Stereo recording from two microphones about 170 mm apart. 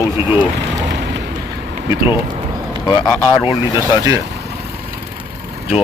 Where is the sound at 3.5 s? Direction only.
25° left (ahead or behind).